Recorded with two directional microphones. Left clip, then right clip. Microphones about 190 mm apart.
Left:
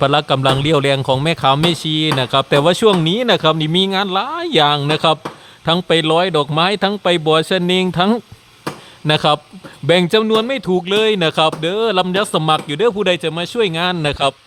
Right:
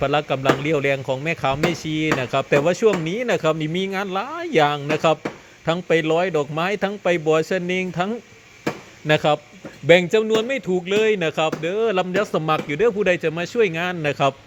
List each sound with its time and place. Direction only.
0.0 s speech: 30° left (ahead or behind)